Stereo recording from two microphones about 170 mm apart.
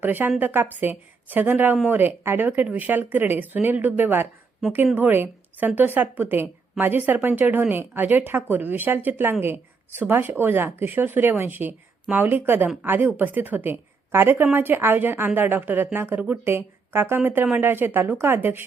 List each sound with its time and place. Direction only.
0.0 s a woman's voice: 10° right (ahead or behind)